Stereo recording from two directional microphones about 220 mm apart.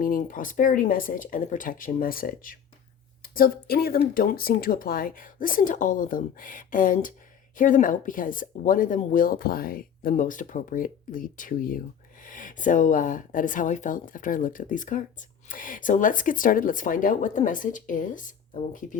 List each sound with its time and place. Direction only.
0.0 s a woman's voice: 40° left (ahead or behind)